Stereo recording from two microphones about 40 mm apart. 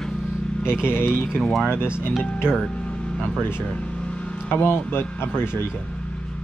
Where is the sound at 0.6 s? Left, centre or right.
Right.